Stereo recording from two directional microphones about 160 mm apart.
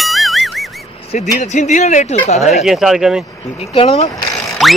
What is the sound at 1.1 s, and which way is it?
Speech, 45° left (ahead or behind).